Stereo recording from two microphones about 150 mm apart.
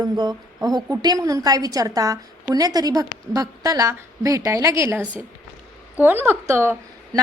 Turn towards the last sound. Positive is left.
turn(degrees=-15)  # may be behind; listen again after turning